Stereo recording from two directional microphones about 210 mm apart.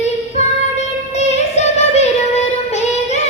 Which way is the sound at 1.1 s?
30° left (ahead or behind).